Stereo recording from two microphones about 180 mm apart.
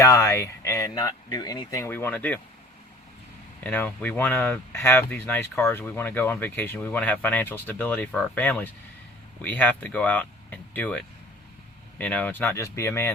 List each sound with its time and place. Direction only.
0.0 s speech: 15° left (ahead or behind)
3.6 s speech: 10° left (ahead or behind)